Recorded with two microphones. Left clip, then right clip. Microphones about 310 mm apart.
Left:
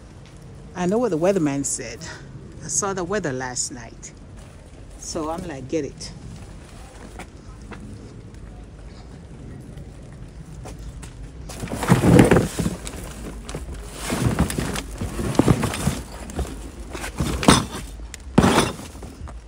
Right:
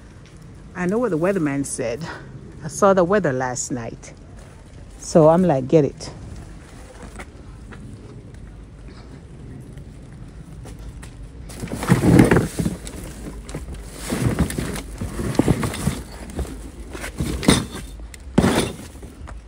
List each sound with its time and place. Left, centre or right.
0.7 s a man's voice: centre
5.1 s a woman's voice: centre
11.4 s a sound: centre